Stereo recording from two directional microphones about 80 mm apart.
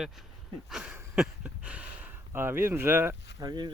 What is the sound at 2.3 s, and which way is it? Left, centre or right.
Speech, right.